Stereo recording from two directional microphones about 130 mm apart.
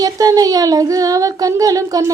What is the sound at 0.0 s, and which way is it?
A woman's voice, 30° right (ahead or behind).